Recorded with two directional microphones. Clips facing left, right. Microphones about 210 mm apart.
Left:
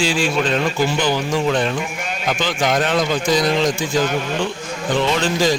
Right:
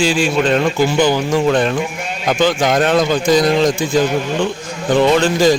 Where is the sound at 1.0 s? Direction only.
50° right (ahead or behind).